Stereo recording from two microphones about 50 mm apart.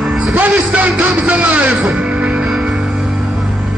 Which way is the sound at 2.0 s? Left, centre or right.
Right.